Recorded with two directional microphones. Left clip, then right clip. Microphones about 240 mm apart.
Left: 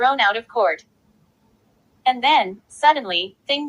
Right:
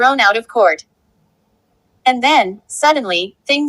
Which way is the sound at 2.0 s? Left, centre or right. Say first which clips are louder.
Right 4 dB; right.